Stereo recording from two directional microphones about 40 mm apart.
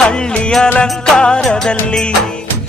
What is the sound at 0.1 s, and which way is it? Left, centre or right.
Music, left.